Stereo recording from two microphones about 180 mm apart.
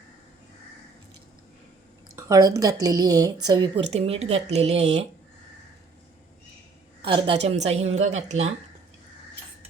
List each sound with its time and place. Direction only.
2.1 s a woman's voice: 20° right (ahead or behind)
3.8 s a woman's voice: 35° right (ahead or behind)
7.0 s a woman's voice: 30° right (ahead or behind)